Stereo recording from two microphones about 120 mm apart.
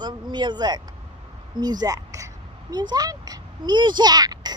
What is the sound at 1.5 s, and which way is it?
Speech, 35° right (ahead or behind).